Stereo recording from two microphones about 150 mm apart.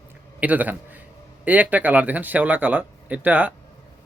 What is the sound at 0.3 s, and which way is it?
A man's voice, 10° right (ahead or behind).